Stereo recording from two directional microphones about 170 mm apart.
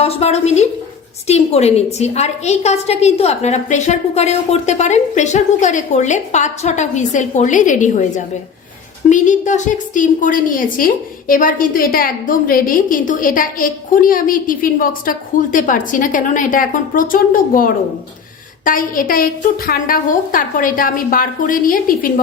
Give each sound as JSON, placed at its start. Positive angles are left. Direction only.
{"t": 0.0, "sound": "a woman's voice", "side_deg": 40}